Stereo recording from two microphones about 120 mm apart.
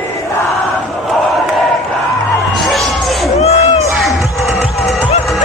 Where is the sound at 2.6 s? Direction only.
Centre (ahead or behind).